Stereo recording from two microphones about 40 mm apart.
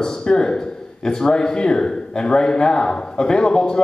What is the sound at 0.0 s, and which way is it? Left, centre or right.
Speech, centre.